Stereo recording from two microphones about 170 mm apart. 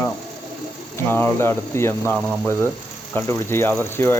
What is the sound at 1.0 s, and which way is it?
Speech, 10° left (ahead or behind).